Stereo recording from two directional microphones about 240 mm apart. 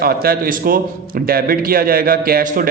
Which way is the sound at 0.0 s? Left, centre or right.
Right.